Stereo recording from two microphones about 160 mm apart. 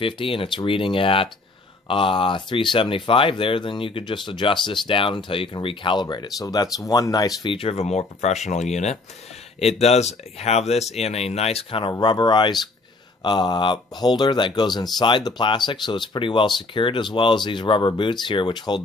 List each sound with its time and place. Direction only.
0.0 s speech: 35° left (ahead or behind)